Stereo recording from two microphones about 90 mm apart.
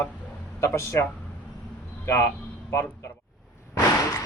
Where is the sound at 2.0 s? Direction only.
25° left (ahead or behind).